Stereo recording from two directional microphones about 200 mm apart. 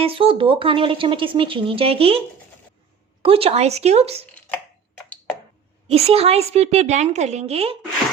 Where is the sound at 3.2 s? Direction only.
30° right (ahead or behind).